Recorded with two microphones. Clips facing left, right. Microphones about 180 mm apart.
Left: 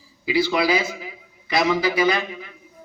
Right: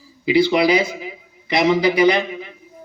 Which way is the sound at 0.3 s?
20° right (ahead or behind).